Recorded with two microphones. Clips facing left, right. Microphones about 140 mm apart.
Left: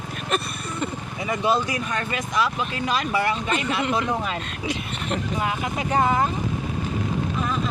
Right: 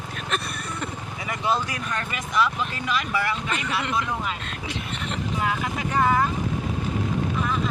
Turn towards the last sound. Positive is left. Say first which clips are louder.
# left 1 dB
turn(degrees=20)  # may be behind; listen again after turning